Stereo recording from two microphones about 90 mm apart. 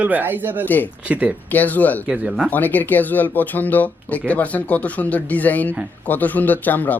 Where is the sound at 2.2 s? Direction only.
5° right (ahead or behind).